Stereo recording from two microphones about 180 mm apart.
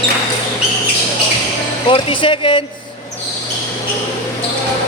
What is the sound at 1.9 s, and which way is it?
Speech, 30° left (ahead or behind).